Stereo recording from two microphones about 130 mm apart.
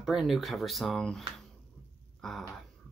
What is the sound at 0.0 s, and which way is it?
Speech, centre (ahead or behind).